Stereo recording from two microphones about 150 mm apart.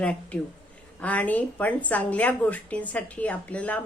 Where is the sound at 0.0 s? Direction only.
10° left (ahead or behind).